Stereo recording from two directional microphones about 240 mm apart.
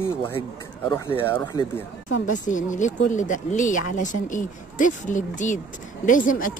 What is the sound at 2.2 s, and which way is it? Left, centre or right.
Speech, left.